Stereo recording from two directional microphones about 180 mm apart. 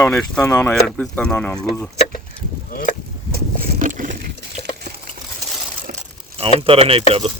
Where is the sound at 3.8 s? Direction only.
45° right (ahead or behind).